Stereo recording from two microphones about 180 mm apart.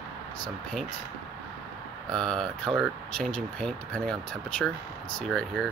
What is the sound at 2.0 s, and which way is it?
Speech, 5° left (ahead or behind).